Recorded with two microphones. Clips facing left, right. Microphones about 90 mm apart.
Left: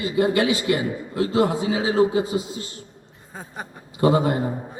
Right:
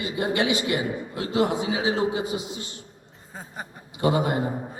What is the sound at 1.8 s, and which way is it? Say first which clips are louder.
Speech: left 7 dB; 25° right (ahead or behind).